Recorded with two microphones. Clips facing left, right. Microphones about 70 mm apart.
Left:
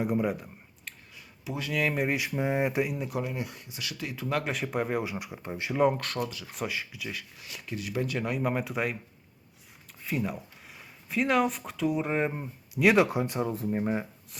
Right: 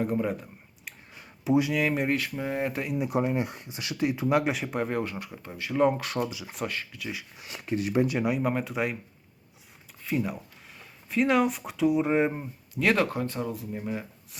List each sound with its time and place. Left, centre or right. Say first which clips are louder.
0.0 s speech: even; centre
1.1 s a sound: right 12 dB; right
1.7 s speech: right 2 dB; centre
2.1 s speech: left 1 dB; centre
3.0 s speech: right 6 dB; right
4.5 s speech: even; centre; by 5.7 s left
5.7 s speech: right 1 dB; centre
6.2 s speech: right 3 dB; centre
6.5 s speech: right 1 dB; centre
7.3 s speech: right 7 dB; right
8.2 s speech: right 3 dB; centre
10.0 s speech: right 2 dB; centre
12.7 s speech: left 2 dB; centre
13.5 s speech: left 5 dB; left